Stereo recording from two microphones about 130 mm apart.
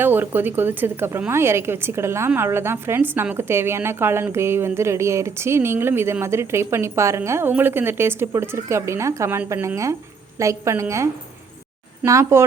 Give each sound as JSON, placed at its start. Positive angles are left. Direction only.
{"t": 0.0, "sound": "a woman's voice", "side_deg": -15}